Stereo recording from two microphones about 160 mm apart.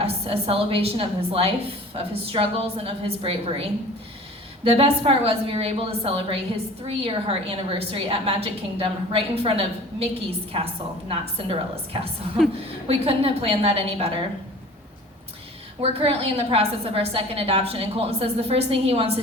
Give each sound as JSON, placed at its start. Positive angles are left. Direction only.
{"t": 0.0, "sound": "a woman's voice", "side_deg": -40}
{"t": 15.8, "sound": "a woman's voice", "side_deg": -35}